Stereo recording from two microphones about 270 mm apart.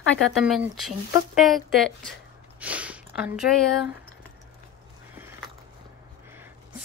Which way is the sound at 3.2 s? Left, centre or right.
Centre.